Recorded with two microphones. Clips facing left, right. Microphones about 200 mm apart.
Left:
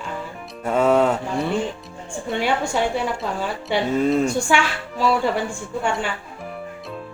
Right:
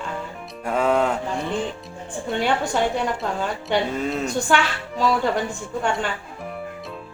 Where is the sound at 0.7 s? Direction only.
5° left (ahead or behind).